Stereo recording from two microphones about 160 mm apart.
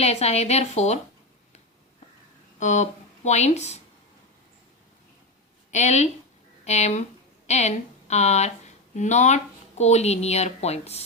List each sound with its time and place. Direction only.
0.0 s a woman's voice: 40° left (ahead or behind)
2.6 s speech: 45° left (ahead or behind)
5.7 s a woman's voice: 45° left (ahead or behind)